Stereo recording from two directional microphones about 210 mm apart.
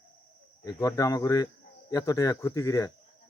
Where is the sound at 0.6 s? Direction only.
15° left (ahead or behind).